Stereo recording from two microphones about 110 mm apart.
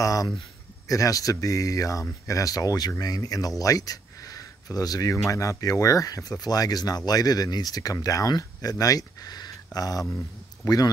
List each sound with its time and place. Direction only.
0.0 s a man's voice: 30° left (ahead or behind)